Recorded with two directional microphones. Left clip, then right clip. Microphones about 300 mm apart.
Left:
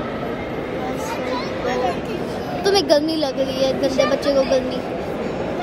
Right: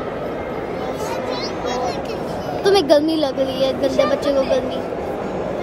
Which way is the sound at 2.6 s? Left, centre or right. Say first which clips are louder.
Right 2 dB; centre.